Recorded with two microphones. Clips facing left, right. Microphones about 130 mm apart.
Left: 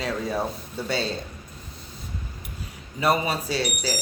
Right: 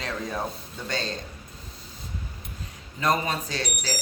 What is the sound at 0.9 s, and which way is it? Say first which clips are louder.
Speech: left 4 dB; 10° left (ahead or behind).